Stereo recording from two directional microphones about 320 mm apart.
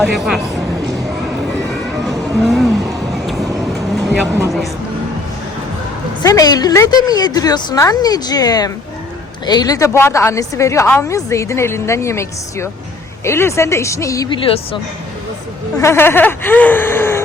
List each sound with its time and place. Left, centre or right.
0.0 s speech: centre
2.0 s a sound: centre
4.4 s speech: centre
6.2 s a woman's voice: centre
15.8 s a woman's voice: centre